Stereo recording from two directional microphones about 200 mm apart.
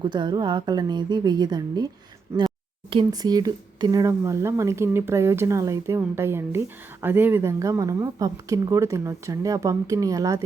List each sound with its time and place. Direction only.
0.0 s a woman's voice: 20° right (ahead or behind)
2.9 s speech: 20° right (ahead or behind)